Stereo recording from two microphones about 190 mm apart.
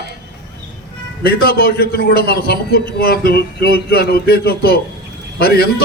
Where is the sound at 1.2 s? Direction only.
55° left (ahead or behind).